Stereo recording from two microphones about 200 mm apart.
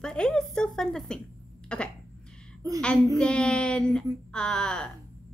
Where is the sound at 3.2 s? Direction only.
5° left (ahead or behind).